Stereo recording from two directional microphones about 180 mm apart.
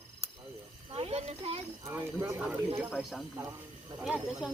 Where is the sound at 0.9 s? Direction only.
35° right (ahead or behind).